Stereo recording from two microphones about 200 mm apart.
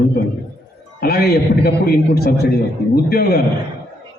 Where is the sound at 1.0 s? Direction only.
50° left (ahead or behind).